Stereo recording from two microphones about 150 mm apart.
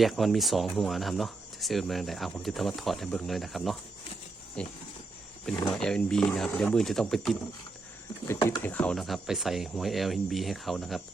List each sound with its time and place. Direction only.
0.0 s speech: centre (ahead or behind)
5.7 s speech: 5° left (ahead or behind)
8.3 s speech: 20° left (ahead or behind)
8.6 s speech: 10° left (ahead or behind)